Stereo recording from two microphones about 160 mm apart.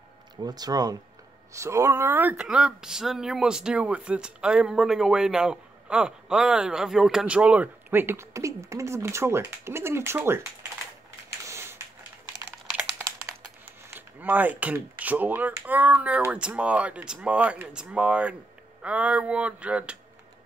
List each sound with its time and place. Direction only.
0.4 s speech: 25° right (ahead or behind)
11.4 s a sound: 15° right (ahead or behind)
12.4 s typing: 15° right (ahead or behind)
13.8 s speech: 10° right (ahead or behind)